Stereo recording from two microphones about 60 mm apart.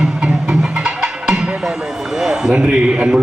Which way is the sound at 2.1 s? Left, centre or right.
Centre.